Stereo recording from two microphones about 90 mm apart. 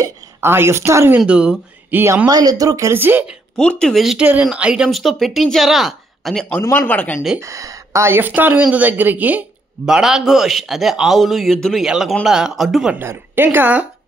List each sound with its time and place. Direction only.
0.4 s speech: 25° right (ahead or behind)
1.2 s speech: 10° right (ahead or behind)
1.9 s speech: 20° right (ahead or behind)
2.2 s speech: 45° right (ahead or behind)
2.9 s speech: 25° right (ahead or behind)
3.5 s speech: 10° left (ahead or behind)
4.2 s a man's voice: 15° right (ahead or behind)
6.6 s speech: 35° left (ahead or behind)
6.9 s speech: 15° left (ahead or behind)
7.3 s speech: 35° right (ahead or behind); by 9.4 s 20° right (ahead or behind)
9.8 s a man's voice: 5° right (ahead or behind)
13.0 s speech: 25° right (ahead or behind)